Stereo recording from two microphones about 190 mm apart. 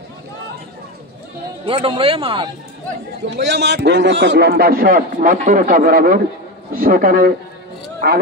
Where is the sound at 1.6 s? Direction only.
30° right (ahead or behind).